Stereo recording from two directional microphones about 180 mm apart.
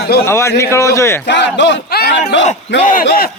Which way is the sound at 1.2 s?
75° left (ahead or behind).